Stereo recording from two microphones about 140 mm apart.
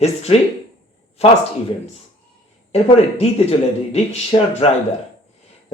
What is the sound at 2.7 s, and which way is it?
Speech, 45° left (ahead or behind).